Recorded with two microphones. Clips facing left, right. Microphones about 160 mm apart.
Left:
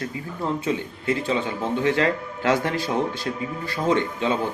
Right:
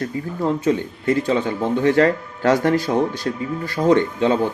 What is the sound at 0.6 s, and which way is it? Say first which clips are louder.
Speech: right 6 dB; 40° right (ahead or behind).